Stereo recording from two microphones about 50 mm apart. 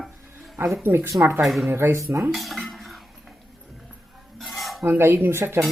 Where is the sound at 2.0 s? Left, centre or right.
Right.